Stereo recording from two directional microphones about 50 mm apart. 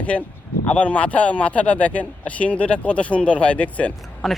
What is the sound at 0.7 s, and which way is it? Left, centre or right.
Speech, left.